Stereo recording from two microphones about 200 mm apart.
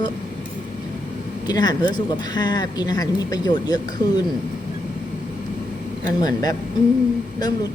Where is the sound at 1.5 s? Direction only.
20° left (ahead or behind).